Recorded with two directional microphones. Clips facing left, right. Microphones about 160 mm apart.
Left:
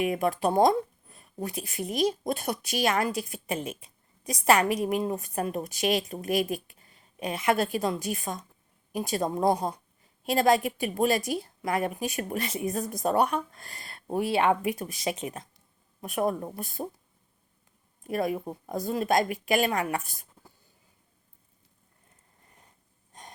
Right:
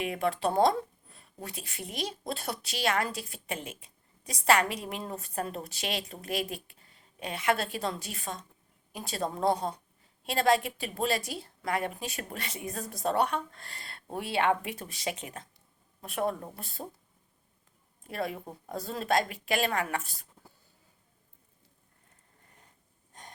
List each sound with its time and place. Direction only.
0.0 s a woman's voice: 20° left (ahead or behind)
18.1 s a woman's voice: 15° left (ahead or behind)